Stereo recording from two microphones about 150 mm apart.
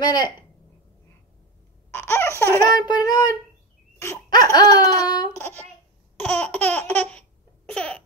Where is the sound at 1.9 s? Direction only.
15° left (ahead or behind).